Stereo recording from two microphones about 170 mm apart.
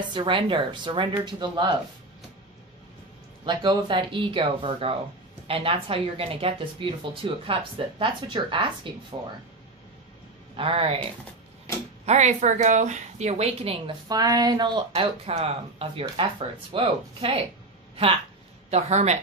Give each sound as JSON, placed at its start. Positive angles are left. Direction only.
{"t": 0.0, "sound": "speech", "side_deg": -25}
{"t": 3.4, "sound": "speech", "side_deg": -25}
{"t": 10.5, "sound": "speech", "side_deg": -35}
{"t": 12.1, "sound": "a woman's voice", "side_deg": -40}
{"t": 14.0, "sound": "speech", "side_deg": -20}
{"t": 18.7, "sound": "speech", "side_deg": -40}